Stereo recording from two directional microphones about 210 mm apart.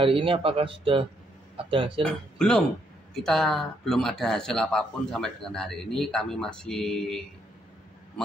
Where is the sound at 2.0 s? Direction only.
5° left (ahead or behind).